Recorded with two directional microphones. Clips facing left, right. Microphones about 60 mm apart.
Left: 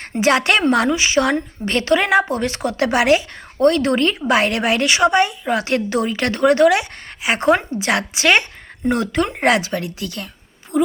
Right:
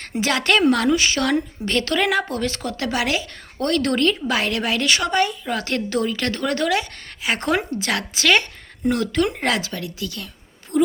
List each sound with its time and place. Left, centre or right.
0.2 s speech: left
10.7 s a woman's voice: centre